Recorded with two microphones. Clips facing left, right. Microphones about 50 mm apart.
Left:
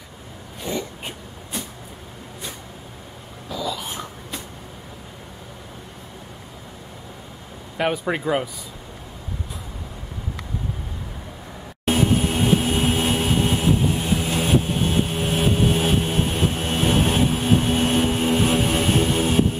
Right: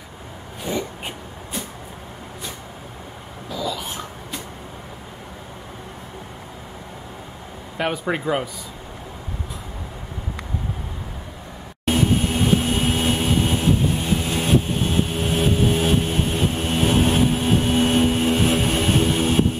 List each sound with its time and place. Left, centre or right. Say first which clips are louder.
0.6 s throat clearing: right 2 dB; centre
3.4 s a sound: right 1 dB; centre
7.7 s speech: left 1 dB; centre
11.8 s vehicle: even; centre